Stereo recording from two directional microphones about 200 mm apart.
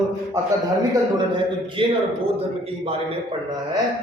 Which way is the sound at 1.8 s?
25° right (ahead or behind).